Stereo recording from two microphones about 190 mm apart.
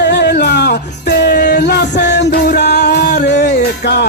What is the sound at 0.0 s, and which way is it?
Music, 60° left (ahead or behind).